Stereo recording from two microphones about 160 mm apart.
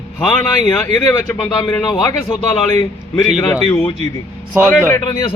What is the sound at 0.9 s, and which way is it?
Speech, 15° left (ahead or behind).